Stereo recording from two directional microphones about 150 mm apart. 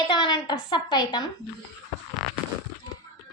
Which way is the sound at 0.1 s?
30° left (ahead or behind).